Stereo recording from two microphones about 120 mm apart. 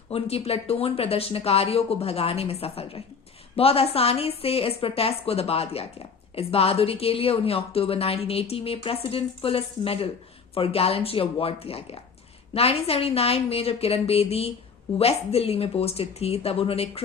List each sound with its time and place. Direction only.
0.1 s a woman's voice: 55° left (ahead or behind)